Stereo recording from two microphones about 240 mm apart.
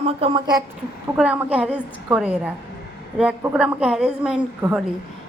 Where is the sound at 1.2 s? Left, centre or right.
Centre.